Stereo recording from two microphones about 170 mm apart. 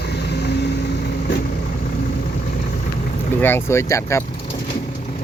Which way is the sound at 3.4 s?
15° left (ahead or behind).